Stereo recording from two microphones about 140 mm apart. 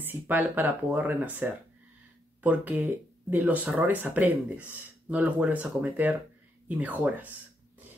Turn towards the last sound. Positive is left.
turn(degrees=-10)  # may be behind; listen again after turning